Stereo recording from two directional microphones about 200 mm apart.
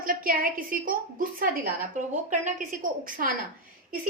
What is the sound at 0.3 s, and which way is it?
A woman's voice, 45° right (ahead or behind).